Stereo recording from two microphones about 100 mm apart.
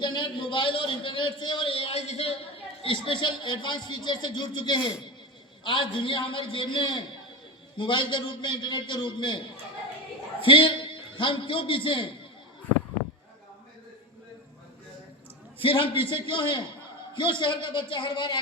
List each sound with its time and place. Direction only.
0.0 s a man's voice: 50° left (ahead or behind); by 2.4 s 80° left
2.8 s a man's voice: 60° left (ahead or behind)
10.4 s a man's voice: 60° left (ahead or behind)
15.5 s a man's voice: 65° left (ahead or behind)